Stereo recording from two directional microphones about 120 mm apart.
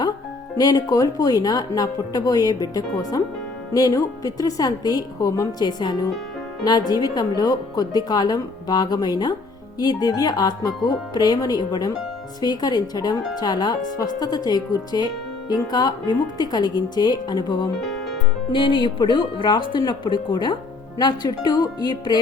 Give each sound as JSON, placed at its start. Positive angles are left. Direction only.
{"t": 0.5, "sound": "speech", "side_deg": 30}